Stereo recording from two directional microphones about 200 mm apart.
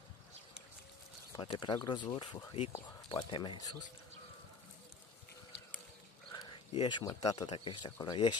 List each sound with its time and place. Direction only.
1.3 s speech: 25° left (ahead or behind)
6.3 s a sound: 20° left (ahead or behind)
7.2 s speech: 20° left (ahead or behind)